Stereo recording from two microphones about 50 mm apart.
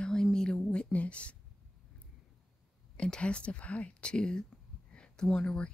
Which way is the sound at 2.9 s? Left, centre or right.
Centre.